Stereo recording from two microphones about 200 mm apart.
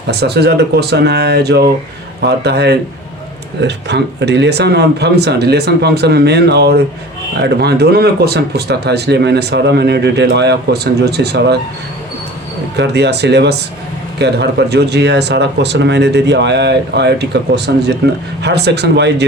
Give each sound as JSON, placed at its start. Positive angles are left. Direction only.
{"t": 0.1, "sound": "speech", "side_deg": -55}
{"t": 12.7, "sound": "speech", "side_deg": -60}